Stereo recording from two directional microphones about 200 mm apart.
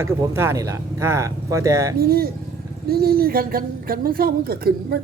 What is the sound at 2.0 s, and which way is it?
A woman's voice, 50° right (ahead or behind).